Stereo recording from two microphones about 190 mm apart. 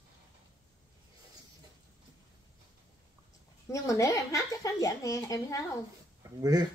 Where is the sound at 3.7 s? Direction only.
15° left (ahead or behind).